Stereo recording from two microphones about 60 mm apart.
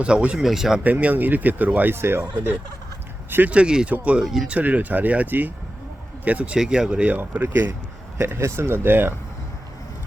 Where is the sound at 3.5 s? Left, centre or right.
Centre.